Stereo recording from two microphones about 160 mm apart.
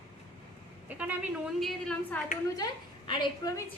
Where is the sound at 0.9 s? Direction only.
10° right (ahead or behind).